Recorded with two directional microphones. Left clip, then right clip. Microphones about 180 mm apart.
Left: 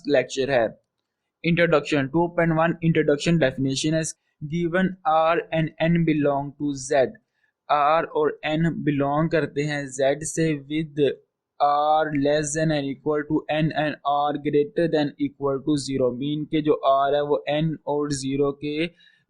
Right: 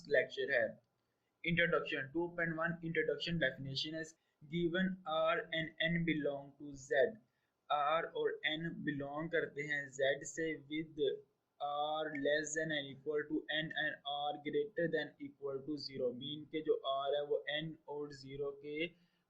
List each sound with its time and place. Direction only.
0.0 s speech: 40° left (ahead or behind)